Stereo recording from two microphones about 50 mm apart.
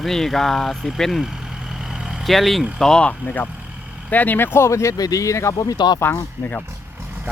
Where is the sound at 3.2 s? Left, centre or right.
Left.